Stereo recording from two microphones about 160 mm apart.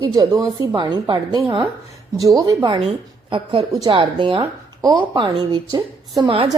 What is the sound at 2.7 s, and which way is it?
A woman's voice, 35° right (ahead or behind).